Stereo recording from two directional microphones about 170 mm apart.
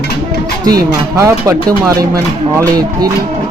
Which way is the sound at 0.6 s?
20° right (ahead or behind).